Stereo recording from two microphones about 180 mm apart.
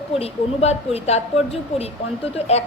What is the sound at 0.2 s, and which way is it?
A woman's voice, 35° left (ahead or behind).